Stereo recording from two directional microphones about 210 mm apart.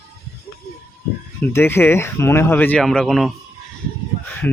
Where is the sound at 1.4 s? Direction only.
10° left (ahead or behind).